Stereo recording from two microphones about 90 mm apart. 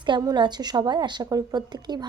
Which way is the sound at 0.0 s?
60° right (ahead or behind).